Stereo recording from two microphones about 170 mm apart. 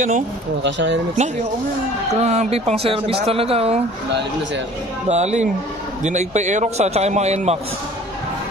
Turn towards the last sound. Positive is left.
turn(degrees=-40)  # may be behind; listen again after turning